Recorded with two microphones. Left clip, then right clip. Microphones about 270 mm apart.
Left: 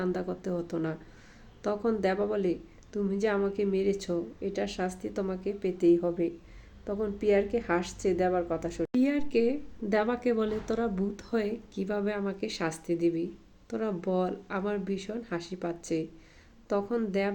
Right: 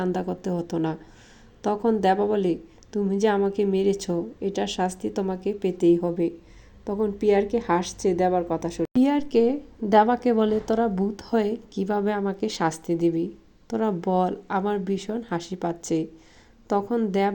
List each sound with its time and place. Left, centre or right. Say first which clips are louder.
0.0 s a woman's voice: right 5 dB; right